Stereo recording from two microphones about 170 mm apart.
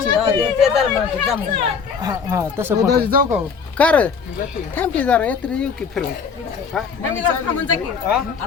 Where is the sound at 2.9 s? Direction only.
60° right (ahead or behind).